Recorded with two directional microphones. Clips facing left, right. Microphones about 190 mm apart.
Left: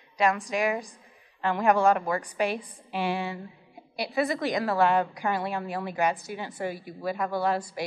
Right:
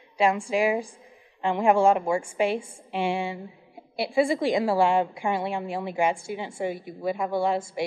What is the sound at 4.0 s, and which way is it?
A woman's voice, 25° right (ahead or behind).